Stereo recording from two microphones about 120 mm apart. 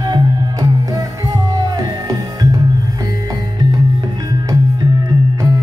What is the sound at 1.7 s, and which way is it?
Music, 30° right (ahead or behind).